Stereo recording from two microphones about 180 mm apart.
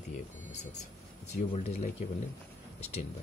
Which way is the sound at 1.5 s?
40° left (ahead or behind).